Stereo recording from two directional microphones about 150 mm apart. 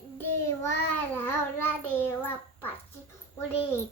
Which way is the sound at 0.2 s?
20° left (ahead or behind).